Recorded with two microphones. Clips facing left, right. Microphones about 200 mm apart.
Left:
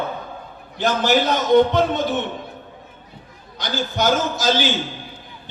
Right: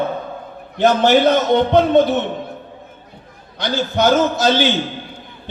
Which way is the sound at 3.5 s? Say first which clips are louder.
Right 5 dB; 60° right (ahead or behind).